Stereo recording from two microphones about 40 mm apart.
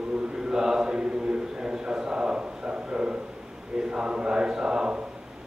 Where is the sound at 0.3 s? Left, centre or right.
Centre.